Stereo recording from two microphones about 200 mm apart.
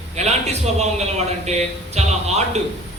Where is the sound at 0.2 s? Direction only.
35° right (ahead or behind).